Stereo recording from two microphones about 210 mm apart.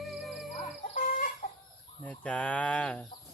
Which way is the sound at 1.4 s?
35° left (ahead or behind).